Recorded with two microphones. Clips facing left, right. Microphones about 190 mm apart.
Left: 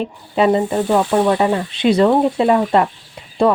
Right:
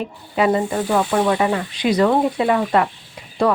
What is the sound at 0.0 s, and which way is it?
A woman's voice, 30° left (ahead or behind).